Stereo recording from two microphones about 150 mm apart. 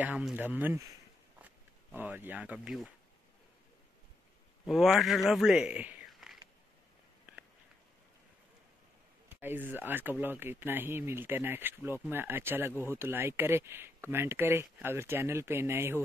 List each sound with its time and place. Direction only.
0.0 s speech: 10° right (ahead or behind)
4.6 s speech: centre (ahead or behind)
9.3 s speech: 15° right (ahead or behind)